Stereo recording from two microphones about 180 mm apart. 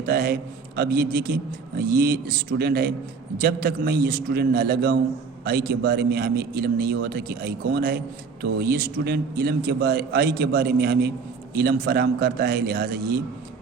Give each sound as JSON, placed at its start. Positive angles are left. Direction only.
{"t": 0.0, "sound": "a man's voice", "side_deg": -55}